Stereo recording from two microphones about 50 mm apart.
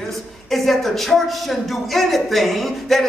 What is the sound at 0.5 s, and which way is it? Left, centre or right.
Speech, centre.